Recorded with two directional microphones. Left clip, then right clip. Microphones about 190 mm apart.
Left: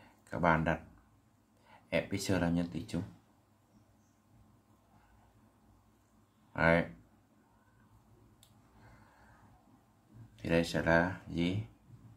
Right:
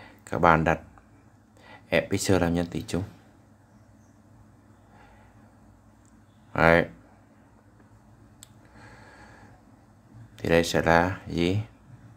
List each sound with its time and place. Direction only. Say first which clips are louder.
0.2 s speech: right 10 dB; 30° right (ahead or behind)
1.9 s speech: right 10 dB; 30° right (ahead or behind)
6.5 s speech: right 9 dB; 30° right (ahead or behind)
10.3 s speech: right 10 dB; 35° right (ahead or behind)